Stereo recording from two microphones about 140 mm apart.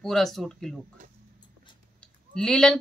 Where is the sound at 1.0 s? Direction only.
65° right (ahead or behind).